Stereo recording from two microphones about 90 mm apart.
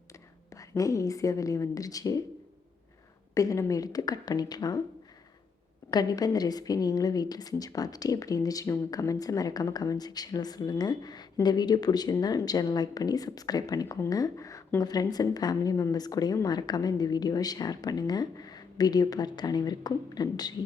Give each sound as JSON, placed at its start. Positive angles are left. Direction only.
{"t": 0.1, "sound": "a woman's voice", "side_deg": 35}
{"t": 3.3, "sound": "a woman's voice", "side_deg": 35}
{"t": 5.9, "sound": "a woman's voice", "side_deg": 45}